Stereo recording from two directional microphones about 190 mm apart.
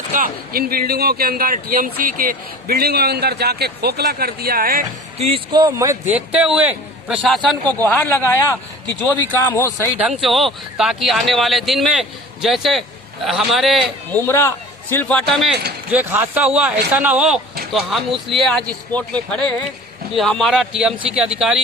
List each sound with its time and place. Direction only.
0.1 s speech: 50° right (ahead or behind)
5.1 s a man's voice: 30° right (ahead or behind); by 7.3 s 5° right (ahead or behind)
7.6 s a man's voice: 20° right (ahead or behind)
7.9 s a man's voice: 10° left (ahead or behind)
10.0 s a man's voice: centre (ahead or behind)
14.1 s a man's voice: 10° left (ahead or behind)
15.9 s a man's voice: 10° right (ahead or behind)